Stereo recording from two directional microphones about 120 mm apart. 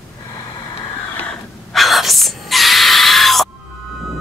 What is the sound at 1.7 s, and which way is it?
Screaming, centre (ahead or behind).